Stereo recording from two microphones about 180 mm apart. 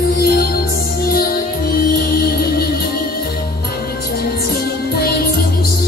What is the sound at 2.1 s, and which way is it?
Music, 60° left (ahead or behind).